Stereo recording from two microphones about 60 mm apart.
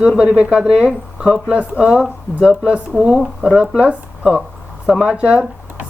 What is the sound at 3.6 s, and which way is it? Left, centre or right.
Speech, centre.